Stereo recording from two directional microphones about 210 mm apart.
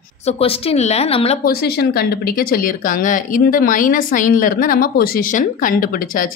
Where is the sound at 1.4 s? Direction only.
50° left (ahead or behind).